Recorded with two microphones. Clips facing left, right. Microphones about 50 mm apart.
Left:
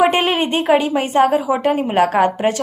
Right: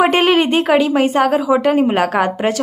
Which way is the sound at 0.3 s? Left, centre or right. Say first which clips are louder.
Right 5 dB; right.